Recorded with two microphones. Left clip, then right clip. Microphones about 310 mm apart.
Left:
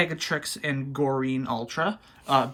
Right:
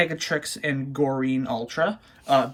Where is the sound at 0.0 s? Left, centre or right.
Centre.